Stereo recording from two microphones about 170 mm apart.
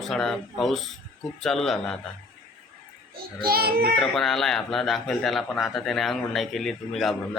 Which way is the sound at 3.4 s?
65° right (ahead or behind).